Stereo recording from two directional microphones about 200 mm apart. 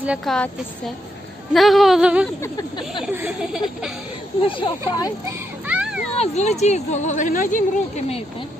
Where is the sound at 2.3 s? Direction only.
15° left (ahead or behind).